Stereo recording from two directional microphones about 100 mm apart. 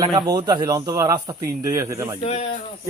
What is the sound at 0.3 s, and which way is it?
A man's voice, 40° right (ahead or behind).